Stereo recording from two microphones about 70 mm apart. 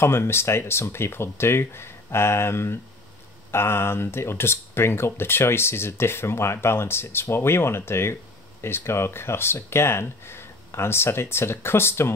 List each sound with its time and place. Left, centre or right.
0.0 s speech: left